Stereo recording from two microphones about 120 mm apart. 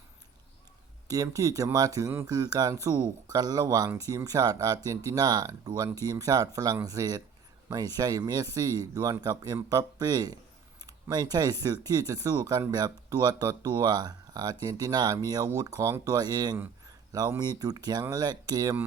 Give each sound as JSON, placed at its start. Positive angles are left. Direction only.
{"t": 1.0, "sound": "speech", "side_deg": -30}